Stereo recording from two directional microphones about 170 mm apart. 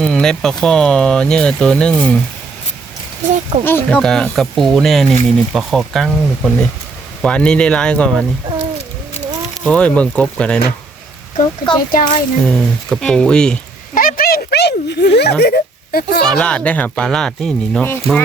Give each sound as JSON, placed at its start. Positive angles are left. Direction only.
{"t": 0.0, "sound": "speech", "side_deg": 5}
{"t": 3.6, "sound": "speech", "side_deg": 10}
{"t": 9.6, "sound": "speech", "side_deg": 5}
{"t": 11.3, "sound": "speech", "side_deg": 25}
{"t": 11.9, "sound": "a child's voice", "side_deg": 55}
{"t": 12.5, "sound": "speech", "side_deg": 5}
{"t": 13.9, "sound": "a sound", "side_deg": 55}
{"t": 16.3, "sound": "speech", "side_deg": 5}